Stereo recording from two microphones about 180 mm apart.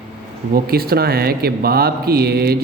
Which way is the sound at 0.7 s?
60° right (ahead or behind).